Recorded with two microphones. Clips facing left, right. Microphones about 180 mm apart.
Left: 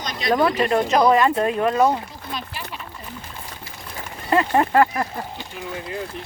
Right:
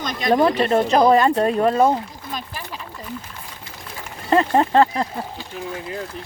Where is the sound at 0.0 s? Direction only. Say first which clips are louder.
Right 3 dB; 50° right (ahead or behind).